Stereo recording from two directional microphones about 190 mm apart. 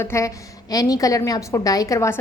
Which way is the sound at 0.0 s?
15° left (ahead or behind).